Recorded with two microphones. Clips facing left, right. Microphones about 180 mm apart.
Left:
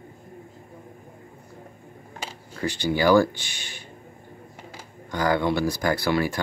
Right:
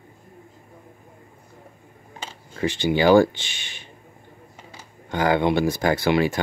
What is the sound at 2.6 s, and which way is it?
Speech, 20° right (ahead or behind).